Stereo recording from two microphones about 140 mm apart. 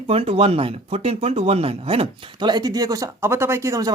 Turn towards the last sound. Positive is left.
turn(degrees=-20)  # may be behind; listen again after turning